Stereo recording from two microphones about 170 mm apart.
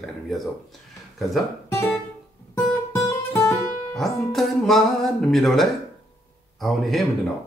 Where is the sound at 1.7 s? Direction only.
15° left (ahead or behind).